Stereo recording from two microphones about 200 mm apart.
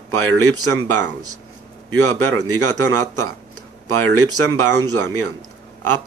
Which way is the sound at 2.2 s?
90° right.